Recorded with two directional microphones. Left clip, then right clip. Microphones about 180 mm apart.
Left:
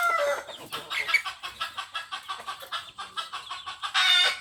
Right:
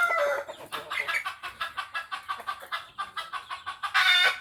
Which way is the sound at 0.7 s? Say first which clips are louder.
Left 4 dB; 15° right (ahead or behind).